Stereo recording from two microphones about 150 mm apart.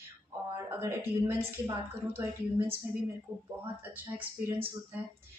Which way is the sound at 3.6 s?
10° right (ahead or behind).